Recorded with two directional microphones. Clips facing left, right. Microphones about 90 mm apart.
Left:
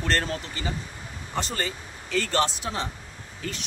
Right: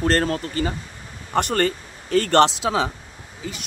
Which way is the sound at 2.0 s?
45° right (ahead or behind).